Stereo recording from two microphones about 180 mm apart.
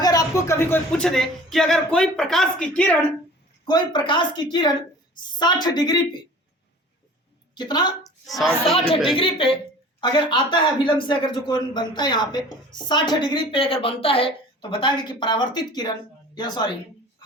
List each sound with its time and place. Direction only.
0.0 s speech: 20° left (ahead or behind)
3.7 s speech: 25° left (ahead or behind)
7.5 s speech: 25° left (ahead or behind)
8.0 s speech: centre (ahead or behind)
8.8 s a woman's voice: 30° left (ahead or behind)